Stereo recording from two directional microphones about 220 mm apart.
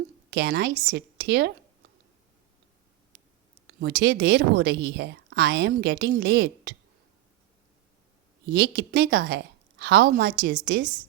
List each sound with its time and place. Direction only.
0.3 s a woman's voice: 50° right (ahead or behind)
3.8 s speech: 50° right (ahead or behind)
8.4 s a woman's voice: 50° right (ahead or behind)